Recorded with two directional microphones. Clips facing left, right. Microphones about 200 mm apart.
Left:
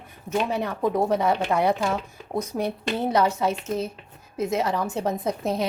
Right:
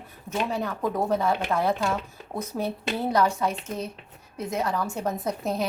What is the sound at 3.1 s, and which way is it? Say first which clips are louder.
A woman's voice: left 1 dB; 25° left (ahead or behind).